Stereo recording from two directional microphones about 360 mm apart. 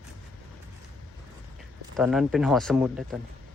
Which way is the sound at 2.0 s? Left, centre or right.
Centre.